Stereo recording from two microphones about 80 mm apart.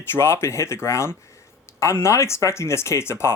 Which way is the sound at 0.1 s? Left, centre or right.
Left.